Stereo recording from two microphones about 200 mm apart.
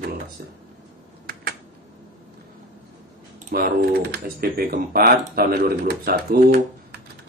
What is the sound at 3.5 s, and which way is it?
Speech, 50° right (ahead or behind).